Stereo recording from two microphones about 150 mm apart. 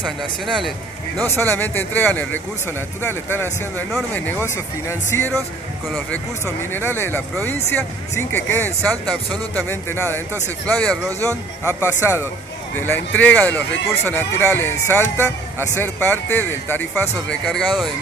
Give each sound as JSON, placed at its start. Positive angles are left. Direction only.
{"t": 0.0, "sound": "speech", "side_deg": 0}
{"t": 1.2, "sound": "speech", "side_deg": 15}
{"t": 5.9, "sound": "speech", "side_deg": 0}
{"t": 6.4, "sound": "speech", "side_deg": 15}
{"t": 11.2, "sound": "speech", "side_deg": -15}
{"t": 12.7, "sound": "speech", "side_deg": 15}